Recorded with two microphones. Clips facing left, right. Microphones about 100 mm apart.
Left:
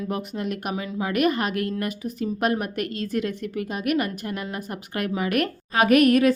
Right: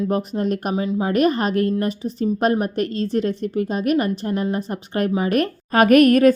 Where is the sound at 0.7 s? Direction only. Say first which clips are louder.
Right 6 dB; 25° right (ahead or behind).